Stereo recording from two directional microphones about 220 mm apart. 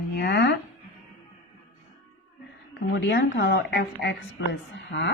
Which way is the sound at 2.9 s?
50° left (ahead or behind).